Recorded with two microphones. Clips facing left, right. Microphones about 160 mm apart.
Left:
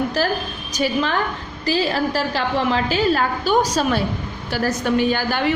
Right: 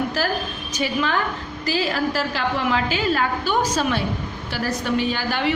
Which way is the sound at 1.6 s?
35° left (ahead or behind).